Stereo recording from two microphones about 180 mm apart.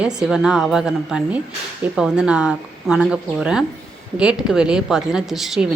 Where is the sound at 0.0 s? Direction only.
5° right (ahead or behind).